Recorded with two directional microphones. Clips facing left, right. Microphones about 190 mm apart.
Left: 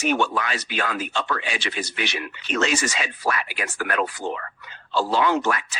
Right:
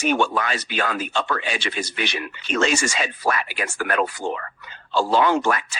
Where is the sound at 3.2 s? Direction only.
45° right (ahead or behind).